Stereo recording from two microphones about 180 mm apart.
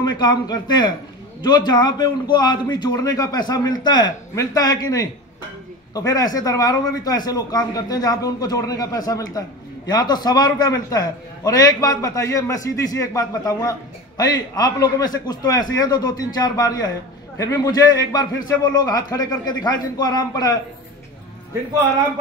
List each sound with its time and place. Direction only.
0.0 s a man's voice: 25° left (ahead or behind)